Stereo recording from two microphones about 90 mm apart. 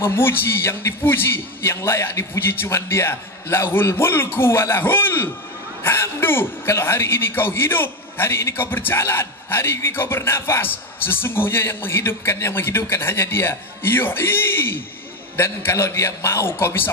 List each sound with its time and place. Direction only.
0.0 s a man's voice: 25° left (ahead or behind)